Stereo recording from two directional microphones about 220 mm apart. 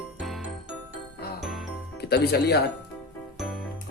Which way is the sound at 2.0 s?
45° left (ahead or behind).